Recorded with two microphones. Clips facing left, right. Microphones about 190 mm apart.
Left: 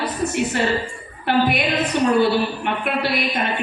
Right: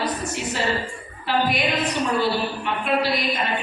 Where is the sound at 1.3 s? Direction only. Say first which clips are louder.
Left 3 dB; 60° left (ahead or behind).